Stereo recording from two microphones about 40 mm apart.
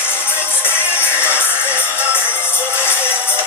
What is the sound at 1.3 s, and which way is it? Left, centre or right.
Music, left.